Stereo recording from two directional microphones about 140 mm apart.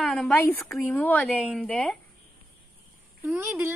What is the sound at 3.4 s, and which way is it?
Speech, 15° right (ahead or behind).